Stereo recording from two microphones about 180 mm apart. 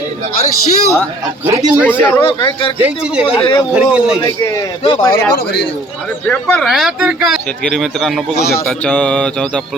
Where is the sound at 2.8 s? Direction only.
5° right (ahead or behind).